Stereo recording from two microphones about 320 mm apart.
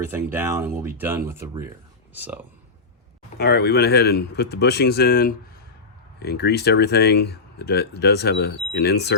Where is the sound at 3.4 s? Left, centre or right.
Left.